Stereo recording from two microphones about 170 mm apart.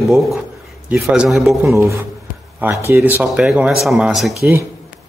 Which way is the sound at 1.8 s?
15° right (ahead or behind).